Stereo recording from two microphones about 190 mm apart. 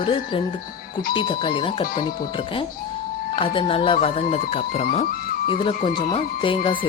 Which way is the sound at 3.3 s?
25° left (ahead or behind).